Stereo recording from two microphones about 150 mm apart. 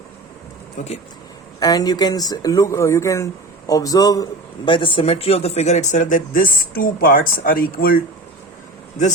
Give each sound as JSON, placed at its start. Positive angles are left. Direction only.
{"t": 0.8, "sound": "speech", "side_deg": 60}
{"t": 1.5, "sound": "a man's voice", "side_deg": 25}